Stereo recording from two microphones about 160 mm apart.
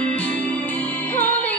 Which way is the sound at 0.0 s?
10° left (ahead or behind).